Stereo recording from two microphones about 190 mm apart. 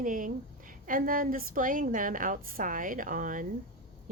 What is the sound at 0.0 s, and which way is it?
A woman's voice, 45° right (ahead or behind).